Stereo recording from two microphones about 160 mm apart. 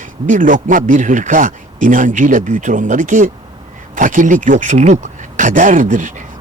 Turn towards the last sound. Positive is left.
turn(degrees=-55)  # may be behind; listen again after turning